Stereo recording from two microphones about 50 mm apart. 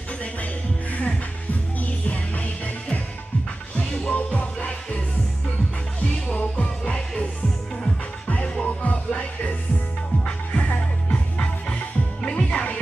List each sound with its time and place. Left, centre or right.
0.9 s music: left
6.5 s music: centre